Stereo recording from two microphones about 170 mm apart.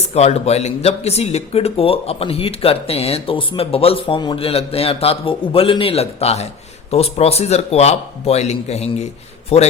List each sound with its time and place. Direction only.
0.1 s speech: 40° left (ahead or behind)